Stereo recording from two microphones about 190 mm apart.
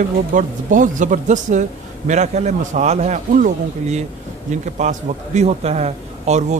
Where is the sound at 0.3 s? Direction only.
40° right (ahead or behind).